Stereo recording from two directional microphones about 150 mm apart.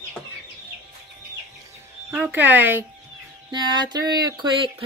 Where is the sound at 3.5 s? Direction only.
30° right (ahead or behind).